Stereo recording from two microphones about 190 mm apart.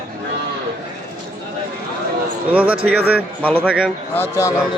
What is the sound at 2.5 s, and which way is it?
Speech, 10° right (ahead or behind).